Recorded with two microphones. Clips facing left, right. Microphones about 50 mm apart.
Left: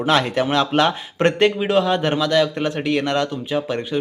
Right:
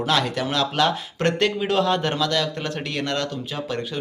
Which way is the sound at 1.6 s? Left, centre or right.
Centre.